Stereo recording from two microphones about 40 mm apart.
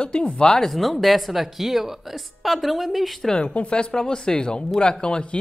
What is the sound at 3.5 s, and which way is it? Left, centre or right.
Speech, left.